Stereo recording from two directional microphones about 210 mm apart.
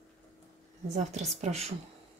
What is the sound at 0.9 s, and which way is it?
Speech, 35° right (ahead or behind).